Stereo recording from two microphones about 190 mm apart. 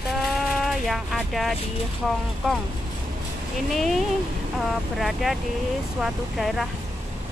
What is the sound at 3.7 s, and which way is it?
Speech, centre (ahead or behind).